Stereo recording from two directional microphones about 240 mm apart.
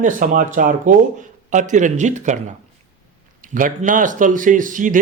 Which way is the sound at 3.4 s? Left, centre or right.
Right.